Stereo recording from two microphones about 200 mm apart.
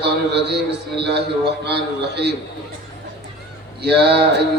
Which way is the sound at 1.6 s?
55° right (ahead or behind).